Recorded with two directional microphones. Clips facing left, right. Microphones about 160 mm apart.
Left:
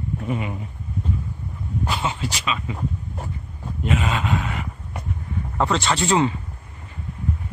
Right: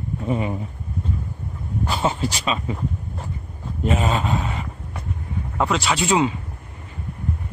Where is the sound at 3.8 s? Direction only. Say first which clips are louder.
Right 2 dB; 35° right (ahead or behind).